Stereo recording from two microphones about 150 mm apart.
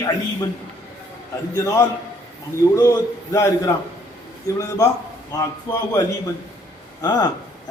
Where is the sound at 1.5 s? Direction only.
20° left (ahead or behind).